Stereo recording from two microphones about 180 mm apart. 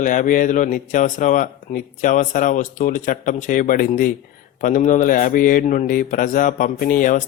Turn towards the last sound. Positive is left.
turn(degrees=45)  # may be behind; listen again after turning